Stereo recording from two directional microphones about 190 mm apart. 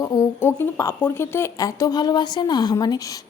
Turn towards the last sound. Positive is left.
turn(degrees=20)  # may be behind; listen again after turning